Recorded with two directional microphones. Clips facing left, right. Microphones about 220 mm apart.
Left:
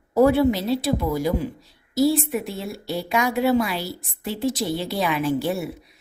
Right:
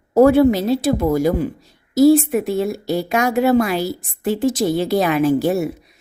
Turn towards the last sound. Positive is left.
turn(degrees=-45)  # may be behind; listen again after turning